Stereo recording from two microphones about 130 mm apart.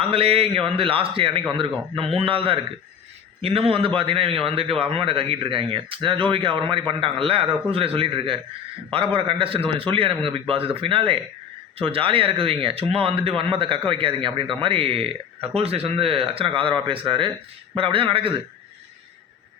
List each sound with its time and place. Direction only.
0.0 s speech: 50° right (ahead or behind)